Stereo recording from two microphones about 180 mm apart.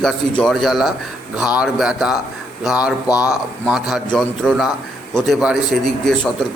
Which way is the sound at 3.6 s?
5° right (ahead or behind).